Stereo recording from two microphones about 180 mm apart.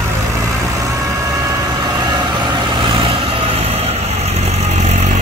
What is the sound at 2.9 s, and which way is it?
Vehicle, 30° right (ahead or behind).